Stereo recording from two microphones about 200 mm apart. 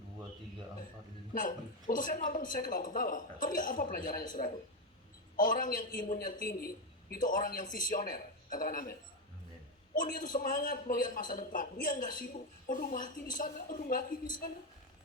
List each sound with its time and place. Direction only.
1.3 s a man's voice: 40° left (ahead or behind)
5.4 s a man's voice: 40° left (ahead or behind)